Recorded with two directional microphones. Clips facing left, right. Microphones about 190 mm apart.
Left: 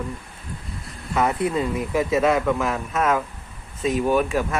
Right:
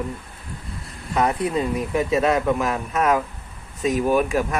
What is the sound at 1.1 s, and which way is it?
Speech, 15° right (ahead or behind).